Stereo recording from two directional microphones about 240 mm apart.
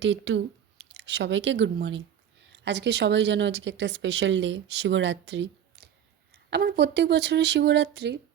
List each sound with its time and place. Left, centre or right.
0.0 s speech: right